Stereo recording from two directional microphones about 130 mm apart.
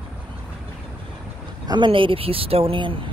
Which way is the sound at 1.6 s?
35° right (ahead or behind).